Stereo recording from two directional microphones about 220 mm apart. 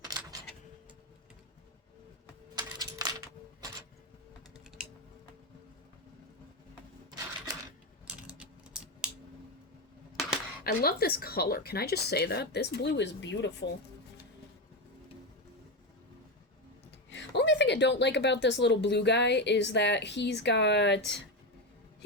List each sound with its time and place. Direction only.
0.0 s keys jangling: 15° right (ahead or behind)
2.6 s coin: 15° right (ahead or behind)
8.3 s typing: 5° right (ahead or behind)
10.6 s speech: 45° left (ahead or behind)
17.1 s a woman's voice: 50° left (ahead or behind)